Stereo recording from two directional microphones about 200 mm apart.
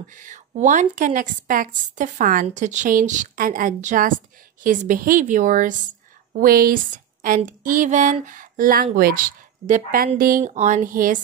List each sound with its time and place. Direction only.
0.1 s a woman's voice: 40° right (ahead or behind)